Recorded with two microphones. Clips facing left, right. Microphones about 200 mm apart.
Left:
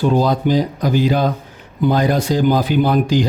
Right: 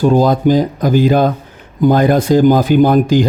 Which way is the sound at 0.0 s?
45° right (ahead or behind).